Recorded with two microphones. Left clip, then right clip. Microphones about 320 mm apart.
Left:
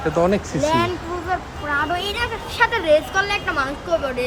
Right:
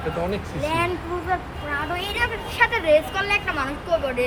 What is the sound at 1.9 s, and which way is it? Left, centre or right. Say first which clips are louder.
Speech: left 1 dB; left.